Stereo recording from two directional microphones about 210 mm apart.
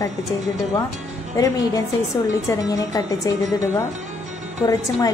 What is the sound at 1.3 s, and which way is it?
A woman's voice, 15° left (ahead or behind).